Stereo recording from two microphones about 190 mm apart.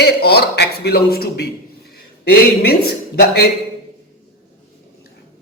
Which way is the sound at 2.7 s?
55° left (ahead or behind).